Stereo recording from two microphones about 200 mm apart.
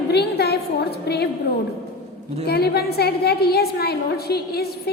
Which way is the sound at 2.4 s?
55° left (ahead or behind).